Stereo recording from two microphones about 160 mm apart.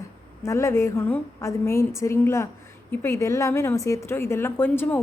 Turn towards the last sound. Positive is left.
turn(degrees=15)  # may be behind; listen again after turning